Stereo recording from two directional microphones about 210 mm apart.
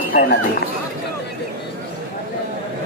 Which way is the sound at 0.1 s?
40° left (ahead or behind).